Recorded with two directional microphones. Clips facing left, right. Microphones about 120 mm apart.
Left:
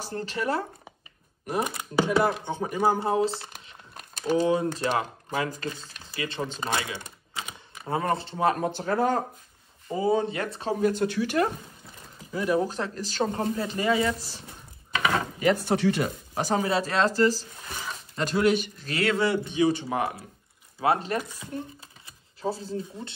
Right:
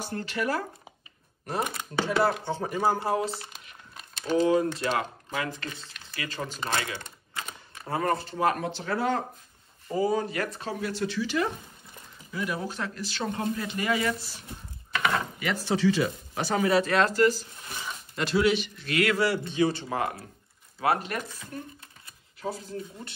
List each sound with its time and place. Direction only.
0.0 s speech: 35° left (ahead or behind)
1.4 s a man's voice: 15° left (ahead or behind)
6.7 s typing: 20° left (ahead or behind)
7.7 s speech: 20° left (ahead or behind)
8.7 s speech: 45° left (ahead or behind)
9.8 s speech: 20° left (ahead or behind); by 11.5 s 50° left (ahead or behind)
12.3 s speech: 35° left (ahead or behind)
15.1 s a sound: 35° left (ahead or behind)
15.5 s speech: 60° left (ahead or behind); by 16.6 s 45° left (ahead or behind)
16.6 s speech: 30° left (ahead or behind)
18.3 s a man's voice: 45° left (ahead or behind); by 23.1 s 30° left (ahead or behind)